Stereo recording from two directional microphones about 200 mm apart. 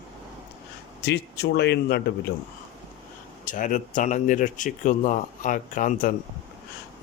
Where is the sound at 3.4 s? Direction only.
40° left (ahead or behind).